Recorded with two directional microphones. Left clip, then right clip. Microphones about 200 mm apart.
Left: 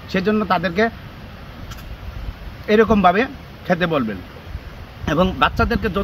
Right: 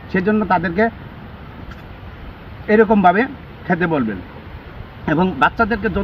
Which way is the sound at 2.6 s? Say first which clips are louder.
Right 2 dB; 20° left (ahead or behind).